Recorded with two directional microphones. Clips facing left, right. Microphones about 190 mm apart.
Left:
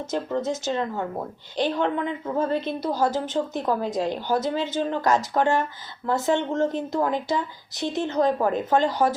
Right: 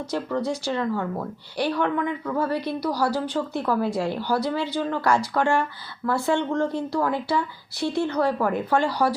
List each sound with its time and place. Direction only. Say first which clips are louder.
0.1 s a woman's voice: even; 20° left (ahead or behind)